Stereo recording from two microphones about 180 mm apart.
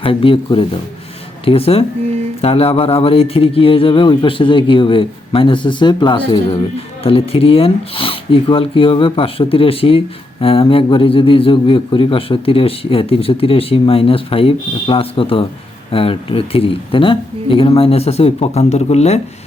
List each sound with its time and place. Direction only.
0.0 s a man's voice: 30° left (ahead or behind)